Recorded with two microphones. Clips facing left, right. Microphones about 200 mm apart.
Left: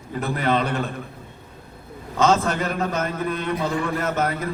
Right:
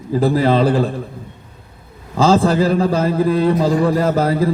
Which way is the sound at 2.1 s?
30° right (ahead or behind).